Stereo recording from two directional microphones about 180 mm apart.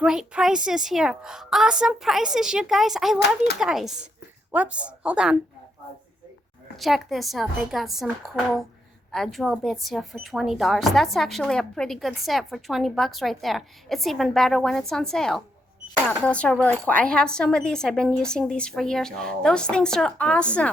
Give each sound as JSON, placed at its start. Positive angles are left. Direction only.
{"t": 0.0, "sound": "speech", "side_deg": -5}
{"t": 3.2, "sound": "speech", "side_deg": 65}
{"t": 3.6, "sound": "a woman's voice", "side_deg": 0}
{"t": 6.7, "sound": "speech", "side_deg": 0}